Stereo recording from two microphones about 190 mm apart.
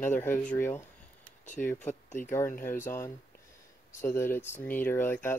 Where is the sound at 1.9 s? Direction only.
40° left (ahead or behind).